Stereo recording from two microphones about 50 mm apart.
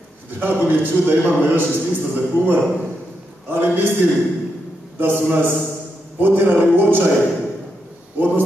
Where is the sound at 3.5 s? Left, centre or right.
Right.